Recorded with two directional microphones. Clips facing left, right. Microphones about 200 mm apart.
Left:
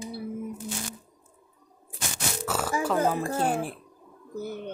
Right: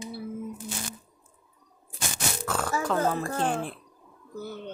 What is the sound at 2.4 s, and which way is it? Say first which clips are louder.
Speech: left 1 dB; 5° left (ahead or behind).